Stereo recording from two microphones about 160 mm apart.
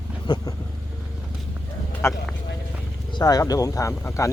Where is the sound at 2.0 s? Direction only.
15° left (ahead or behind).